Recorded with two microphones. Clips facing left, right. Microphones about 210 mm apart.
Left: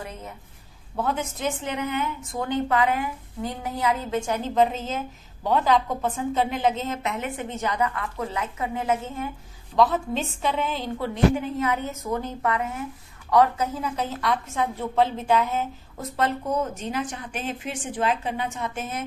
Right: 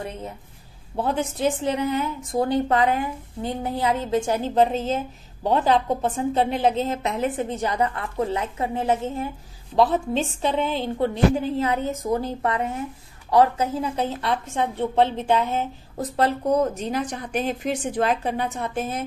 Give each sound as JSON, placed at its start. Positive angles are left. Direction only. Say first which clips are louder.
{"t": 0.9, "sound": "a woman's voice", "louder": "right 3 dB", "side_deg": -30}